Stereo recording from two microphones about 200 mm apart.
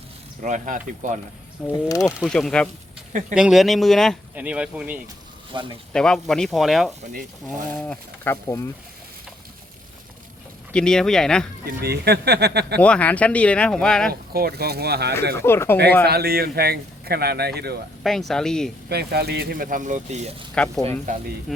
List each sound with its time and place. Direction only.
0.4 s speech: 40° right (ahead or behind)
1.6 s speech: 15° left (ahead or behind)
2.1 s speech: centre (ahead or behind)
3.1 s speech: 40° right (ahead or behind)
3.3 s speech: 5° right (ahead or behind); by 8.7 s 15° left (ahead or behind)
10.7 s speech: 5° left (ahead or behind)
11.6 s speech: 50° right (ahead or behind)
12.8 s speech: 5° left (ahead or behind)
14.1 s a man's voice: 50° right (ahead or behind)
15.4 s speech: 10° left (ahead or behind)
16.0 s a man's voice: 50° right (ahead or behind)
18.0 s speech: centre (ahead or behind)
18.9 s a man's voice: 55° right (ahead or behind); by 20.3 s 35° right (ahead or behind)
20.6 s speech: 5° left (ahead or behind)